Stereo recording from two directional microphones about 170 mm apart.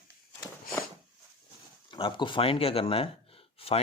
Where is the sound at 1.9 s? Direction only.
30° left (ahead or behind).